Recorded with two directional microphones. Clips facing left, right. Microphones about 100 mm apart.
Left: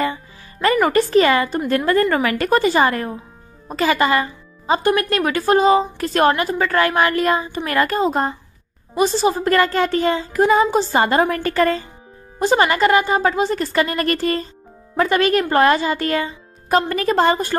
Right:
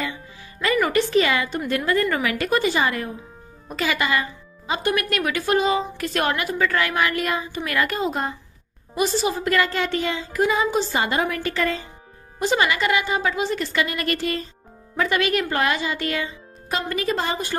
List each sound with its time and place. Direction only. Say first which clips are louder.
0.0 s music: left 8 dB; 40° left (ahead or behind)
1.1 s a woman's voice: left 5 dB; 45° left (ahead or behind)